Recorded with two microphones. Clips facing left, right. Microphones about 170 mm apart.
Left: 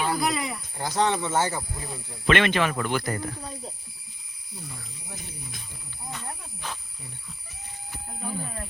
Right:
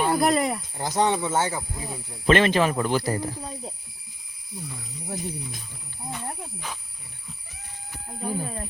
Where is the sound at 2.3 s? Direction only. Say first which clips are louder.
Right 3 dB; 35° right (ahead or behind).